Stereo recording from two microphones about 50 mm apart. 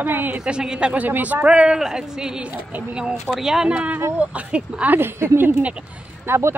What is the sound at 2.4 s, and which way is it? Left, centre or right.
Speech, right.